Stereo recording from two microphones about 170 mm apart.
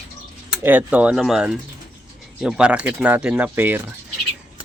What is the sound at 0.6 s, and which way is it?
Speech, 10° right (ahead or behind).